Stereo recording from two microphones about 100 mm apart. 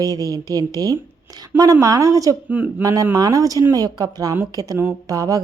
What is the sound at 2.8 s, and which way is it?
Speech, 35° right (ahead or behind).